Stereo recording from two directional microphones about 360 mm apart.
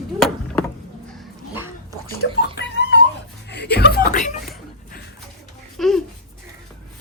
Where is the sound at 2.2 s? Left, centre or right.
Left.